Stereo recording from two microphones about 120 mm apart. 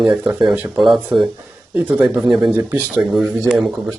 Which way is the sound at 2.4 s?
25° right (ahead or behind).